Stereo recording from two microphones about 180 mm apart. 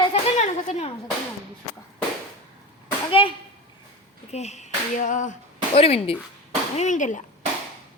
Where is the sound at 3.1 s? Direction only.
30° left (ahead or behind).